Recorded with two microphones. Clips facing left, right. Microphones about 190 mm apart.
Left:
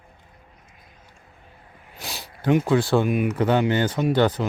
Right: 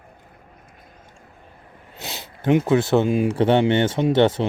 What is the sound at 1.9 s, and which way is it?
Speech, 20° right (ahead or behind).